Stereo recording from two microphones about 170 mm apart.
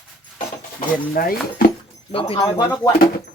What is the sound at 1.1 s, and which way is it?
Speech, 60° left (ahead or behind).